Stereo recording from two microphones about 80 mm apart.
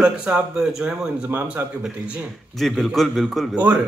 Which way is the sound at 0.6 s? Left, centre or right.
Centre.